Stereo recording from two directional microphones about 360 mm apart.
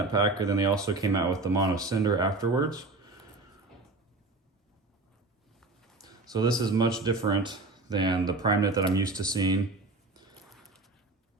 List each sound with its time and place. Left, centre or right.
0.1 s speech: centre
6.0 s speech: centre
10.5 s a sound: centre